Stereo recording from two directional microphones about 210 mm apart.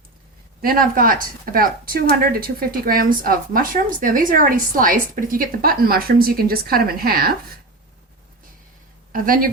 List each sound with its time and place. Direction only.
0.6 s speech: 45° right (ahead or behind)
9.1 s speech: 40° right (ahead or behind)